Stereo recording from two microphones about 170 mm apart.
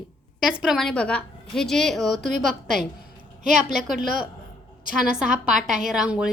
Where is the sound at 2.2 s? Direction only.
50° right (ahead or behind).